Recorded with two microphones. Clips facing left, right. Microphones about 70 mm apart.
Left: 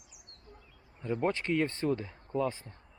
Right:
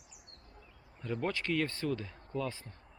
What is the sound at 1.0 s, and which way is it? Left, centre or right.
Speech, left.